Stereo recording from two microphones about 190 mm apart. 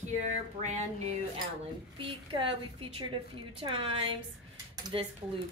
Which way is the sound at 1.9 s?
30° right (ahead or behind).